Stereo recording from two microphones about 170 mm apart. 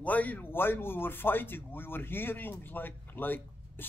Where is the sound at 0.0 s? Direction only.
10° left (ahead or behind).